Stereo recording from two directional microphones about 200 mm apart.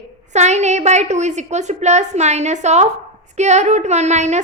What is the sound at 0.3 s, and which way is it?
A woman's voice, 35° right (ahead or behind).